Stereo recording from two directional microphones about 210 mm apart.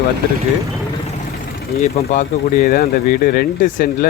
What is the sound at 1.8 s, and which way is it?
Speech, 35° left (ahead or behind).